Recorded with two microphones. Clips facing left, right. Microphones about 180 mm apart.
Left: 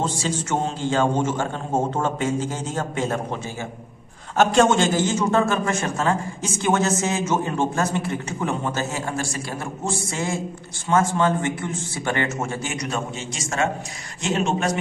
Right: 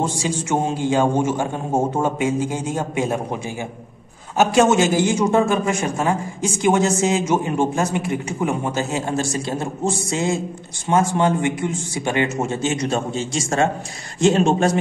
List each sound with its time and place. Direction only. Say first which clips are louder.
0.0 s a man's voice: right 2 dB; 10° right (ahead or behind); by 14.8 s 30° right (ahead or behind)